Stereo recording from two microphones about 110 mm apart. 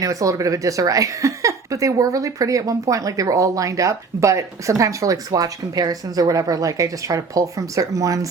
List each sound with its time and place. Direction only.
0.0 s speech: 30° right (ahead or behind)